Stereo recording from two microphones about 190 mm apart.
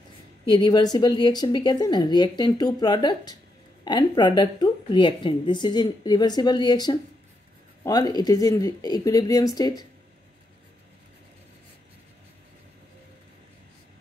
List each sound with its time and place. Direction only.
0.5 s a woman's voice: 25° left (ahead or behind)